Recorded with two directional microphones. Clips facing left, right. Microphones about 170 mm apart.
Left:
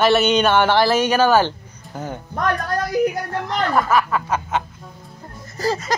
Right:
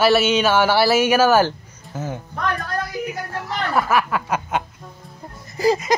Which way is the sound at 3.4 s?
5° right (ahead or behind).